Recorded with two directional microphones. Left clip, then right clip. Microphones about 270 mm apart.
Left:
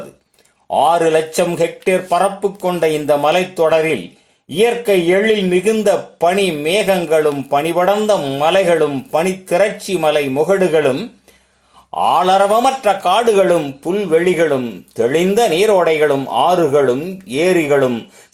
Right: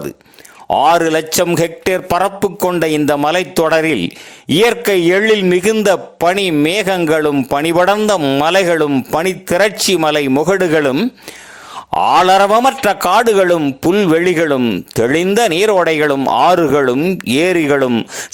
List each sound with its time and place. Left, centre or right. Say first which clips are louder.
0.8 s speech: right 1 dB; right
11.9 s speech: right 3 dB; right
17.0 s speech: right 4 dB; right